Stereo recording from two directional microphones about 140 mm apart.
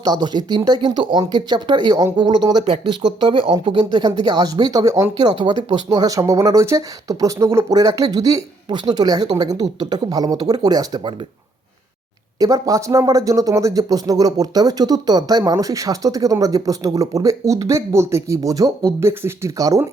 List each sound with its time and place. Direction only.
0.0 s speech: 30° right (ahead or behind)
12.4 s speech: 25° right (ahead or behind)